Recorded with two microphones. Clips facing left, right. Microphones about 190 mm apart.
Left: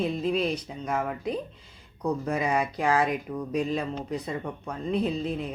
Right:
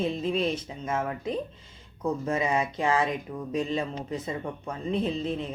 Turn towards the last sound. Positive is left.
turn(degrees=5)  # may be behind; listen again after turning